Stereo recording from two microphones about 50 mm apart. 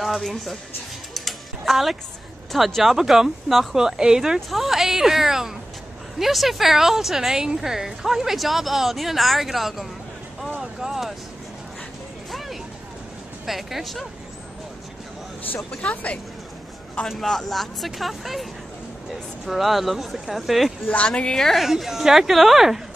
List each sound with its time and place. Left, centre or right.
0.0 s speech: centre
1.1 s tick-tock: centre
2.5 s a woman's voice: centre
10.6 s a sound: centre
12.3 s a sound: centre
13.5 s a woman's voice: centre
15.8 s speech: left
17.2 s a woman's voice: centre
21.1 s a woman's voice: centre
21.5 s a woman's voice: centre